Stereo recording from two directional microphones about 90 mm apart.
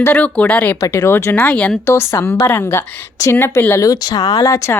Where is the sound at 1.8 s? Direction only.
30° left (ahead or behind).